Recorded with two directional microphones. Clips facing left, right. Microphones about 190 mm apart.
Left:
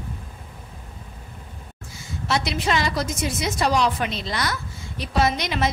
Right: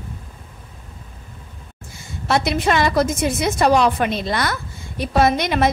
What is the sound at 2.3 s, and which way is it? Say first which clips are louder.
A woman's voice: right 5 dB; 55° right (ahead or behind).